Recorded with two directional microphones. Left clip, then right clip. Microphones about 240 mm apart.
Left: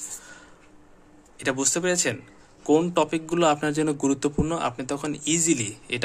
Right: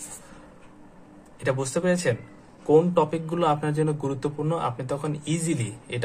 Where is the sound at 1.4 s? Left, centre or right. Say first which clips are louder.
Even; left.